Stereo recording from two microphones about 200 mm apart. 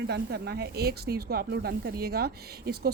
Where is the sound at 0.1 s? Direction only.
55° right (ahead or behind).